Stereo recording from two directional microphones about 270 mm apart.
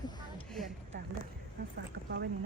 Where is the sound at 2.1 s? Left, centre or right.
Right.